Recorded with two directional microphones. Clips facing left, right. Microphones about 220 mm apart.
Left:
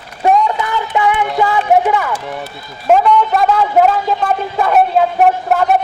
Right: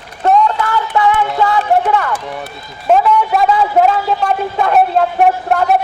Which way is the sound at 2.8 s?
Centre (ahead or behind).